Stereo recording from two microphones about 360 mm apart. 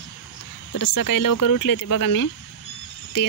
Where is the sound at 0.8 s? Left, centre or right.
Left.